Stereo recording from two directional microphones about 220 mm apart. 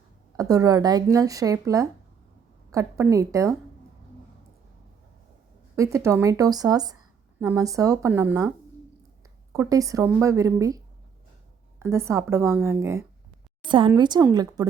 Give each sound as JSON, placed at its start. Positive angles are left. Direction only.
{"t": 0.3, "sound": "speech", "side_deg": -15}
{"t": 5.7, "sound": "speech", "side_deg": -15}
{"t": 11.8, "sound": "speech", "side_deg": -10}
{"t": 13.7, "sound": "a woman's voice", "side_deg": -20}